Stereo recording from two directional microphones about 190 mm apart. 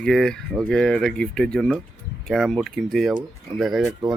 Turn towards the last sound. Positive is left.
turn(degrees=0)  # may be behind; listen again after turning